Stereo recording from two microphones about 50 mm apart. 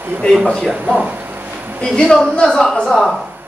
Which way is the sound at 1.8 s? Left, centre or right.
Centre.